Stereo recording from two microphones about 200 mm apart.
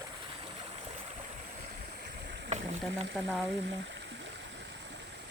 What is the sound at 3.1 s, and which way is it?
Speech, centre (ahead or behind).